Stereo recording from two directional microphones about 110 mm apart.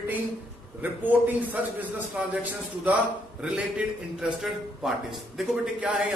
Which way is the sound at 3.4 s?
10° right (ahead or behind).